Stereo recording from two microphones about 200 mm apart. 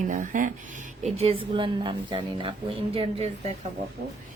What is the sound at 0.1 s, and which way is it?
Speech, 40° right (ahead or behind).